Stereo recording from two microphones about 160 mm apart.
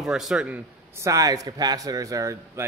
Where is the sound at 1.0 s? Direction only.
20° right (ahead or behind).